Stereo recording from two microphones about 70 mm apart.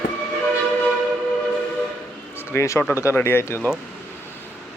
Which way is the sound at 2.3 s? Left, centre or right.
Left.